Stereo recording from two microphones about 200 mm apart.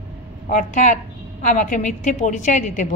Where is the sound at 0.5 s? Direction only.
40° left (ahead or behind).